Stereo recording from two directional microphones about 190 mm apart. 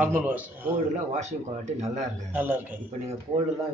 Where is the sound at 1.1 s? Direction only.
35° right (ahead or behind).